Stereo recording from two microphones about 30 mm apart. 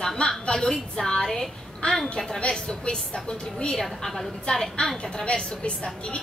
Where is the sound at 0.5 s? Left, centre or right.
Left.